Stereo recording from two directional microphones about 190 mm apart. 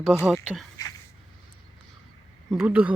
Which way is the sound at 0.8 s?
20° left (ahead or behind).